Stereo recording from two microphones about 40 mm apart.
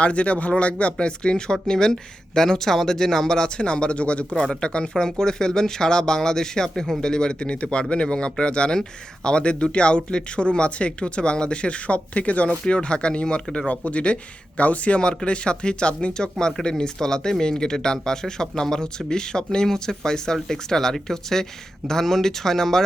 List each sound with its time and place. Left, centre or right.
0.0 s speech: left; by 3.5 s centre
3.6 s speech: left
12.6 s speech: left
13.7 s speech: left; by 22.8 s centre